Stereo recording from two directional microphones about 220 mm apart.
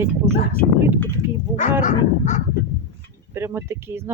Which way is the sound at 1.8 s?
35° left (ahead or behind).